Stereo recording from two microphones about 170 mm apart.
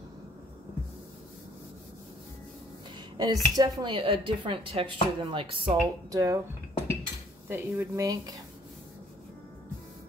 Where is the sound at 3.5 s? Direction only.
25° right (ahead or behind).